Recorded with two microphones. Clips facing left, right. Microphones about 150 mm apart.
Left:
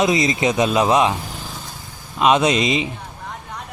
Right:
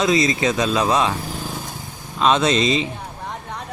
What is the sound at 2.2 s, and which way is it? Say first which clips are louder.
Speech: left 1 dB; 15° left (ahead or behind).